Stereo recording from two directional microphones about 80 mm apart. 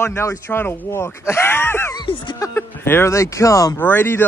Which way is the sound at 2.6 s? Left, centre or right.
Left.